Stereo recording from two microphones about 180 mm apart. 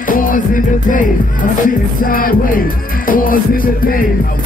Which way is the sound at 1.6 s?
50° left (ahead or behind).